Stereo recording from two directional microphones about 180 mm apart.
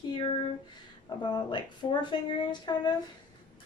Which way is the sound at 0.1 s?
30° left (ahead or behind).